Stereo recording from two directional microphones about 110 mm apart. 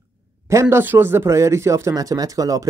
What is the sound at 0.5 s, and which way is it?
Speech, 25° right (ahead or behind).